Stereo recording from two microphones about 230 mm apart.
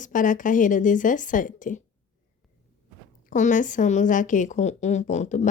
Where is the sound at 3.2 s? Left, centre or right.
Left.